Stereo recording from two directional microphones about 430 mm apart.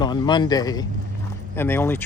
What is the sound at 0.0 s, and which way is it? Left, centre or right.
Speech, centre.